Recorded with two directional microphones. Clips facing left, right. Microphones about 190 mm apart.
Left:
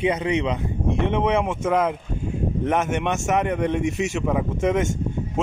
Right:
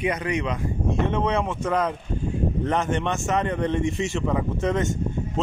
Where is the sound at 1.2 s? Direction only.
10° left (ahead or behind).